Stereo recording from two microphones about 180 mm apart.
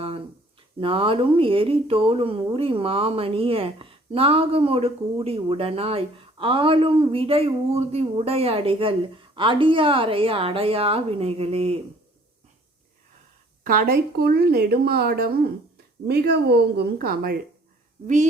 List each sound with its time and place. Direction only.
0.8 s speech: 30° right (ahead or behind)
13.7 s speech: 55° right (ahead or behind)
18.0 s speech: 40° right (ahead or behind)